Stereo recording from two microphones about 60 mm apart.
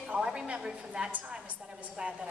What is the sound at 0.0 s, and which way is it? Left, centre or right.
A woman's voice, centre.